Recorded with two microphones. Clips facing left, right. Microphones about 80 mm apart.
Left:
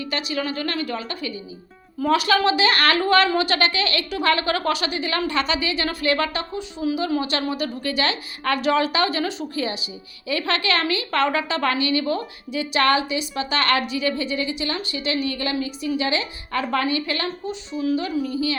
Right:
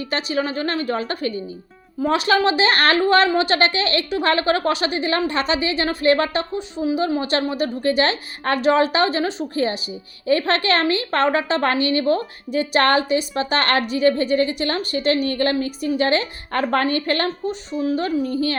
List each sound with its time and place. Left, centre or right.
0.0 s a woman's voice: right
2.0 s a woman's voice: right